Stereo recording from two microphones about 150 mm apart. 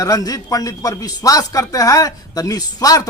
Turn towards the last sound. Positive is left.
turn(degrees=25)  # may be behind; listen again after turning